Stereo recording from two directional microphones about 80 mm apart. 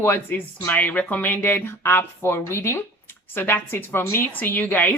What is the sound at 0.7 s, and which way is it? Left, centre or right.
A woman's voice, centre.